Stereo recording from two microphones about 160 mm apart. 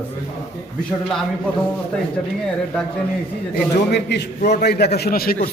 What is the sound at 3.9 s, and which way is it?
A man's voice, 90° left.